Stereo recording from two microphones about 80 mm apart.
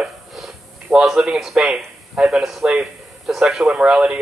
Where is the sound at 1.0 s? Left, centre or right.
Centre.